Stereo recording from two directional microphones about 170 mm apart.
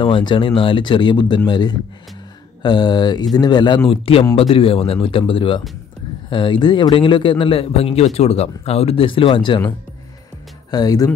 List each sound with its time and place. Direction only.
0.0 s speech: 30° left (ahead or behind)
10.7 s speech: 20° left (ahead or behind)